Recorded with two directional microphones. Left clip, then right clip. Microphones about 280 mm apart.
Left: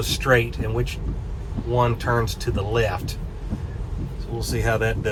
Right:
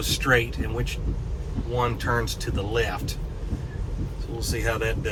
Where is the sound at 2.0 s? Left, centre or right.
Centre.